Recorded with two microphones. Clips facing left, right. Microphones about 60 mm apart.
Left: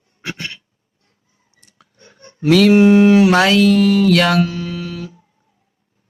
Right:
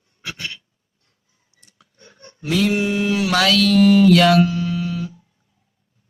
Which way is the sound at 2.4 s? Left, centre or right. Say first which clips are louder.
Left 8 dB; left.